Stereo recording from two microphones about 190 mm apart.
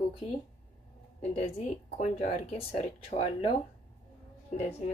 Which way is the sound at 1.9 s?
35° left (ahead or behind).